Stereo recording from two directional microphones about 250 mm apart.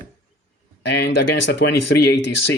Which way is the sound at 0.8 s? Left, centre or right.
Left.